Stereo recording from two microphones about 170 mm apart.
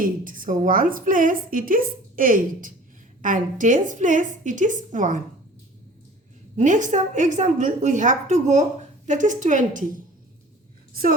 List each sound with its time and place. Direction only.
0.0 s a woman's voice: 55° right (ahead or behind)
6.6 s a woman's voice: 45° right (ahead or behind)